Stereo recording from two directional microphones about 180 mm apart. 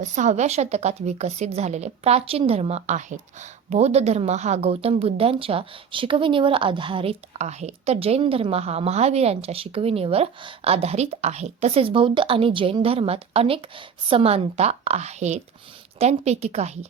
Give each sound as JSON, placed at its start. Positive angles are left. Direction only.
{"t": 0.0, "sound": "a woman's voice", "side_deg": -40}